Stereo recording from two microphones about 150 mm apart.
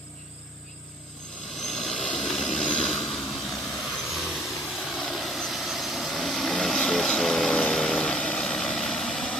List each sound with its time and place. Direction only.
1.6 s vehicle: 5° left (ahead or behind)